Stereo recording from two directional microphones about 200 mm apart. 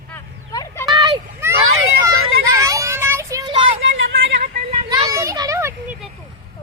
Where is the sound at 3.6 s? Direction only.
75° right (ahead or behind).